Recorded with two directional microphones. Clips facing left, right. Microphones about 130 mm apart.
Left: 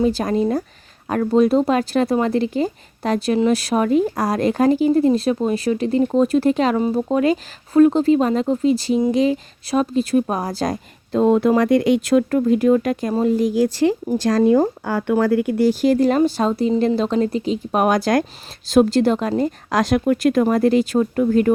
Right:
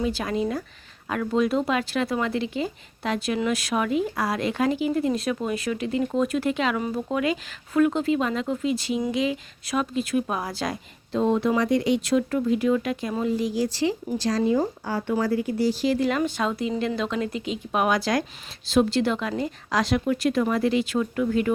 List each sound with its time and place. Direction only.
0.0 s speech: 40° left (ahead or behind)